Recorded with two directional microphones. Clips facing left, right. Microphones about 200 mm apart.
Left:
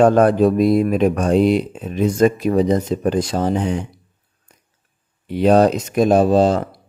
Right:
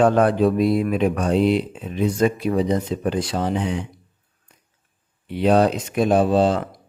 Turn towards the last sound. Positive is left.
turn(degrees=40)  # may be behind; listen again after turning